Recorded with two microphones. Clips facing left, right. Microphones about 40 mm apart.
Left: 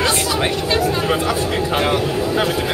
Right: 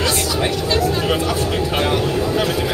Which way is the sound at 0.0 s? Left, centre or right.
Left.